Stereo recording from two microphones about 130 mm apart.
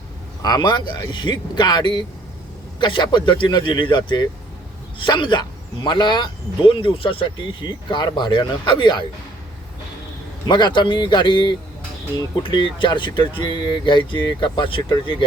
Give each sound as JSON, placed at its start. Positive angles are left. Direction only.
{"t": 0.4, "sound": "speech", "side_deg": 35}
{"t": 10.5, "sound": "speech", "side_deg": 35}